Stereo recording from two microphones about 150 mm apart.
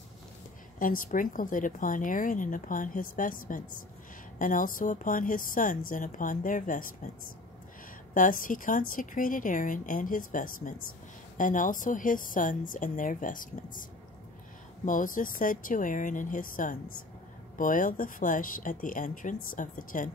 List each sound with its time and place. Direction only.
0.7 s speech: 65° left (ahead or behind)
8.1 s speech: 65° left (ahead or behind)
14.9 s speech: 60° left (ahead or behind)